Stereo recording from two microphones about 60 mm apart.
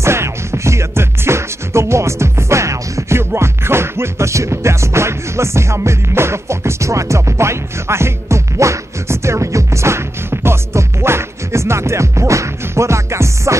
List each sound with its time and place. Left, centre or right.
0.0 s music: right